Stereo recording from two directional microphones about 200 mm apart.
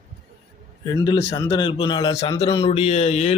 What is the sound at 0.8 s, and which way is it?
A man's voice, 20° left (ahead or behind).